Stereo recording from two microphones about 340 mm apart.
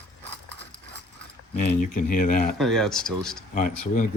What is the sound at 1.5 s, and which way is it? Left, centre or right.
Speech, left.